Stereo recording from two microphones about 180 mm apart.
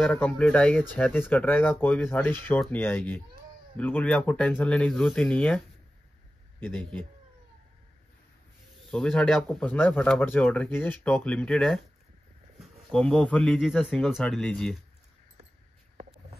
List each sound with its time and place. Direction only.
0.0 s speech: 5° left (ahead or behind)
6.6 s speech: 10° left (ahead or behind)
8.9 s speech: 5° left (ahead or behind)
12.9 s speech: 5° left (ahead or behind)